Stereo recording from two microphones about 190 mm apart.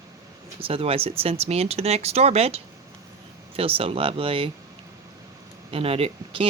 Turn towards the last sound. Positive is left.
turn(degrees=-30)  # may be behind; listen again after turning